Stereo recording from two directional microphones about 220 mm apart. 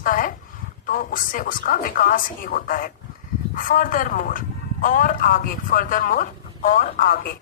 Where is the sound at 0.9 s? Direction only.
40° left (ahead or behind).